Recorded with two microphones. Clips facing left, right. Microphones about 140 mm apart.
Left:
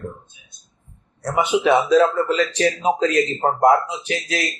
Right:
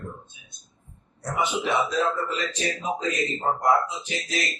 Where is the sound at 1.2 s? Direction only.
75° left (ahead or behind).